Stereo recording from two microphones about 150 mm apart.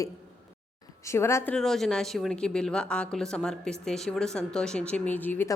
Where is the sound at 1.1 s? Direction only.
20° left (ahead or behind).